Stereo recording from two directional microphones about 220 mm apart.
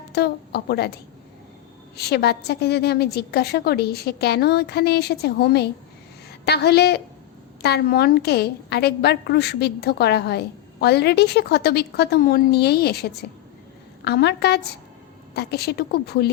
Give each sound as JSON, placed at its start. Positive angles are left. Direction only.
{"t": 0.1, "sound": "a woman's voice", "side_deg": 45}
{"t": 2.0, "sound": "a woman's voice", "side_deg": 45}